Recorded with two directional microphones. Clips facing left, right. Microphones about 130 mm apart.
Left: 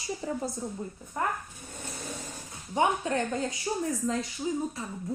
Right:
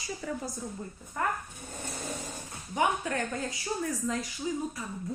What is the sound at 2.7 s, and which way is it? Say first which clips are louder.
A woman's voice: left 2 dB; 25° left (ahead or behind).